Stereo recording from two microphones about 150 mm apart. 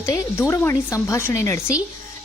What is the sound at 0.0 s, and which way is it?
A woman's voice, 20° left (ahead or behind).